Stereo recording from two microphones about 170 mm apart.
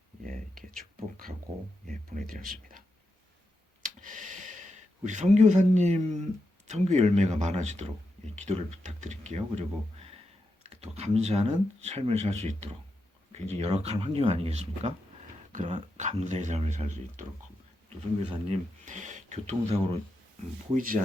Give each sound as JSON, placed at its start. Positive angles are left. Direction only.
{"t": 0.3, "sound": "a sound", "side_deg": -55}
{"t": 1.5, "sound": "speech", "side_deg": -45}
{"t": 1.9, "sound": "speech", "side_deg": -55}
{"t": 3.8, "sound": "speech", "side_deg": -50}
{"t": 15.5, "sound": "speech", "side_deg": -45}
{"t": 18.9, "sound": "speech", "side_deg": -45}
{"t": 20.7, "sound": "speech", "side_deg": -55}